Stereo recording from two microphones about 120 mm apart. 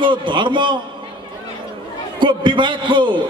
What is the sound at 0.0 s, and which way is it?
Speech, 40° right (ahead or behind).